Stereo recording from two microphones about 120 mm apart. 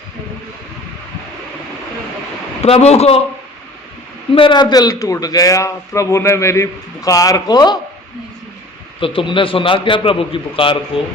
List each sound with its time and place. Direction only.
2.6 s speech: 60° left (ahead or behind)
4.4 s a man's voice: 40° left (ahead or behind)
9.0 s a man's voice: 45° left (ahead or behind)